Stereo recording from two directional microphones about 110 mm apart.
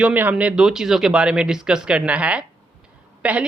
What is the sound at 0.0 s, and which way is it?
A woman's voice, 15° right (ahead or behind).